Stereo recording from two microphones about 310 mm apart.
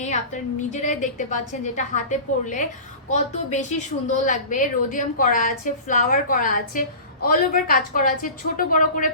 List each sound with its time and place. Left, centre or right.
0.7 s a woman's voice: left